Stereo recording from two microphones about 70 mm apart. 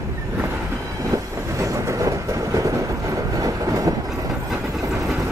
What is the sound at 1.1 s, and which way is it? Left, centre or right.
Train, right.